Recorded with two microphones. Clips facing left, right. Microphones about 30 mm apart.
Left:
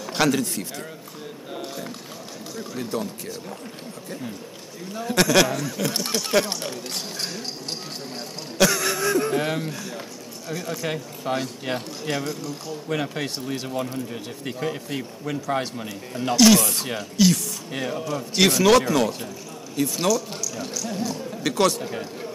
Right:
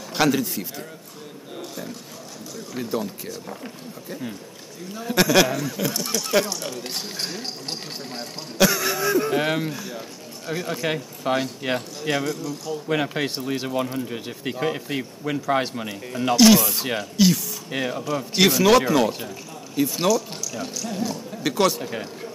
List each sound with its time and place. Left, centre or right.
0.1 s speech: centre
2.7 s speech: centre
4.9 s speech: centre
5.9 s speech: left
7.2 s a man's voice: centre
9.4 s a man's voice: centre
10.4 s a man's voice: centre
16.8 s a man's voice: centre